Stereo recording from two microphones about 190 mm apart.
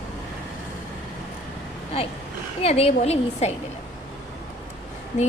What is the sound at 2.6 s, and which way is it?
Speech, 35° left (ahead or behind).